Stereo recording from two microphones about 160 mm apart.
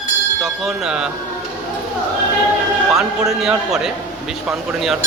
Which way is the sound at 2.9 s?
5° right (ahead or behind).